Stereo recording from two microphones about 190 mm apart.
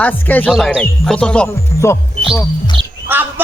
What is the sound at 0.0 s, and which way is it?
Speech, 10° left (ahead or behind).